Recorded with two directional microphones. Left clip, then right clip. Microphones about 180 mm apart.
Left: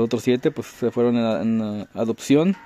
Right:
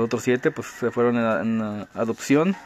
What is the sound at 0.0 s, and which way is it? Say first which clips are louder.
Speech: left 1 dB; 35° left (ahead or behind).